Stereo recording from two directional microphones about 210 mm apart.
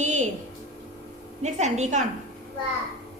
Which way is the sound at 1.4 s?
35° right (ahead or behind).